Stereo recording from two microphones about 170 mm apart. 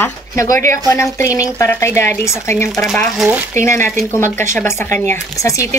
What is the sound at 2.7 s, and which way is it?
Speech, centre (ahead or behind).